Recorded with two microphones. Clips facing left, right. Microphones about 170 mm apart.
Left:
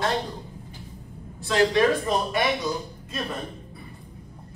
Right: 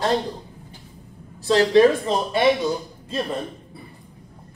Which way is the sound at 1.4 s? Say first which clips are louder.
Right 5 dB; 30° right (ahead or behind).